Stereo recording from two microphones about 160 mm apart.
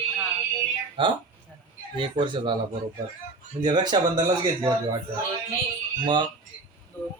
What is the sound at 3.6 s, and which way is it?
Speech, 25° right (ahead or behind).